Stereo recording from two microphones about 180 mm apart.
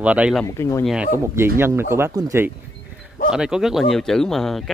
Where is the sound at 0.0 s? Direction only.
5° right (ahead or behind).